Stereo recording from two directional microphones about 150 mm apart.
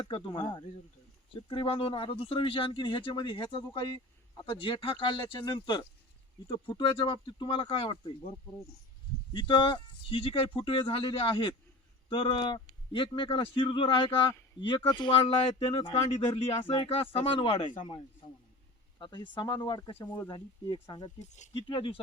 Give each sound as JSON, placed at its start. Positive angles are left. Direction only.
{"t": 0.0, "sound": "speech", "side_deg": 35}
{"t": 9.3, "sound": "speech", "side_deg": 30}
{"t": 14.8, "sound": "a sound", "side_deg": 30}
{"t": 16.3, "sound": "speech", "side_deg": 40}
{"t": 18.9, "sound": "speech", "side_deg": 30}
{"t": 21.2, "sound": "speech", "side_deg": 50}
{"t": 21.5, "sound": "speech", "side_deg": 30}